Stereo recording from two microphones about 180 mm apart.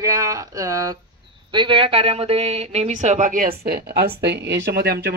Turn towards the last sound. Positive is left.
turn(degrees=-65)  # may be behind; listen again after turning